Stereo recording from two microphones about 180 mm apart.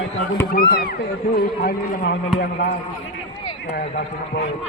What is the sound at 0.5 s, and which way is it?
Speech, 55° left (ahead or behind).